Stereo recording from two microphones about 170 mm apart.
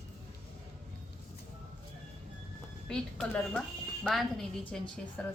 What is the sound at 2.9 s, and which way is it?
A woman's voice, 5° left (ahead or behind).